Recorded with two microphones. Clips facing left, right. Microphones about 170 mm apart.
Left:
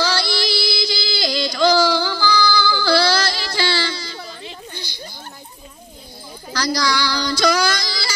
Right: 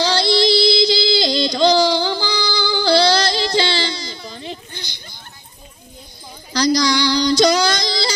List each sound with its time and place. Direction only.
0.0 s music: 20° right (ahead or behind)
6.5 s child singing: 15° right (ahead or behind)